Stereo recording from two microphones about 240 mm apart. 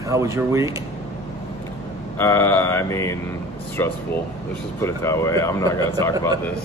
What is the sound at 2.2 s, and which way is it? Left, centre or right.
Speech, centre.